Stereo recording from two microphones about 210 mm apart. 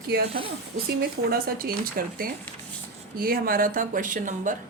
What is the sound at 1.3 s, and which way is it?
A woman's voice, 45° right (ahead or behind).